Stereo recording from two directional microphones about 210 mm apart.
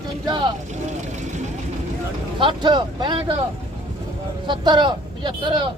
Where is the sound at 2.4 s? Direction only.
20° right (ahead or behind).